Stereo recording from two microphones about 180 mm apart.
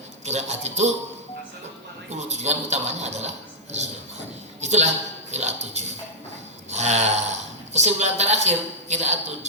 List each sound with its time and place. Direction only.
0.3 s speech: 40° right (ahead or behind)
2.1 s speech: 40° right (ahead or behind)